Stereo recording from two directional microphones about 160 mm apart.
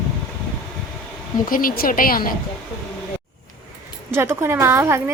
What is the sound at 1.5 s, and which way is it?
Speech, 60° left (ahead or behind).